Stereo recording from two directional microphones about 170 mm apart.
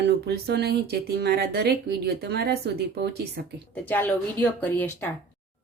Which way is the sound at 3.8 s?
10° left (ahead or behind).